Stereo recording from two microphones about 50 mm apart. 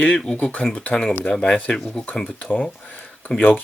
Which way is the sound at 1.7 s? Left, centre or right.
Centre.